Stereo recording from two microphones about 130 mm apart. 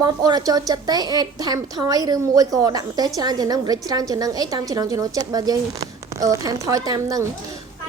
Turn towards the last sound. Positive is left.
turn(degrees=-30)  # may be behind; listen again after turning